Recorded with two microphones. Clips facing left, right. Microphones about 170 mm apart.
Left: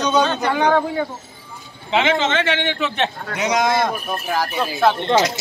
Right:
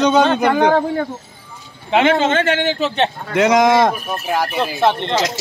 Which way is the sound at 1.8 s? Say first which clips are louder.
Right 4 dB; 55° right (ahead or behind).